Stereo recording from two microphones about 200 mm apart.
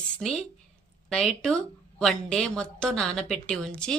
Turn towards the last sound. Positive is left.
turn(degrees=5)  # may be behind; listen again after turning